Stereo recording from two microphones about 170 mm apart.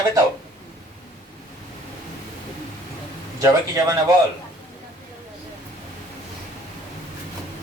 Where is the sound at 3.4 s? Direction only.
20° right (ahead or behind).